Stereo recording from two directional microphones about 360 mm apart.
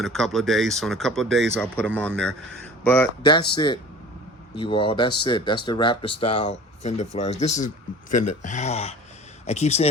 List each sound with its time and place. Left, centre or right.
0.0 s speech: centre